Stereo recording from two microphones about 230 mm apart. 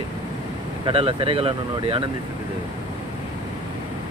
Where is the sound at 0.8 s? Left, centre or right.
Right.